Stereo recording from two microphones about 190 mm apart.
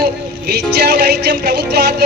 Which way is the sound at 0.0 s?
55° right (ahead or behind).